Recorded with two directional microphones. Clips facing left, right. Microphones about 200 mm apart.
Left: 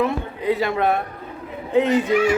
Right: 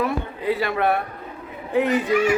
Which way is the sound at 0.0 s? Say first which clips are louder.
Left 2 dB; 20° left (ahead or behind).